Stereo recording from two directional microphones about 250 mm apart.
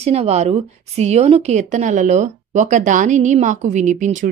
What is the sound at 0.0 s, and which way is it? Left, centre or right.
A woman's voice, right.